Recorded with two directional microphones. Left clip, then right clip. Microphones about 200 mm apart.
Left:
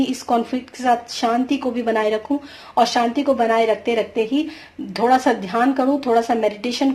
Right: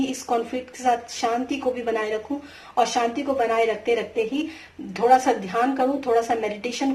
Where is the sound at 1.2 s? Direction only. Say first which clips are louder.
Left 4 dB; 40° left (ahead or behind).